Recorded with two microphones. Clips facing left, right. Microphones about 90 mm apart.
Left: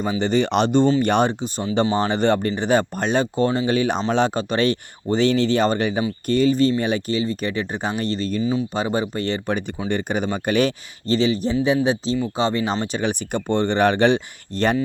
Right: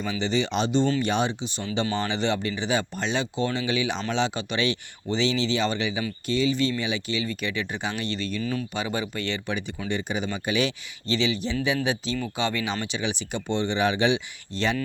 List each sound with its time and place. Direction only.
0.0 s speech: 45° left (ahead or behind)
8.4 s speech: 20° left (ahead or behind)
8.7 s speech: 35° left (ahead or behind)